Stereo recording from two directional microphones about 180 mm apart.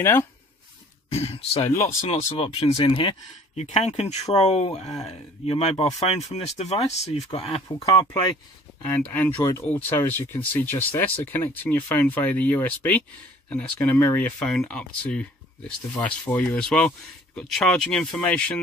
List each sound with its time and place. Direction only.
0.0 s speech: 15° left (ahead or behind)
1.1 s speech: 35° left (ahead or behind); by 18.4 s 5° left (ahead or behind)